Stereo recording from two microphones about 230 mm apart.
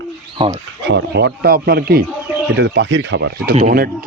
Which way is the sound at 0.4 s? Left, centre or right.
Right.